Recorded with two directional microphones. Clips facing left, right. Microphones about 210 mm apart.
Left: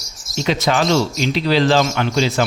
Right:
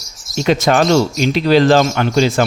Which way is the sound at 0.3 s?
50° right (ahead or behind).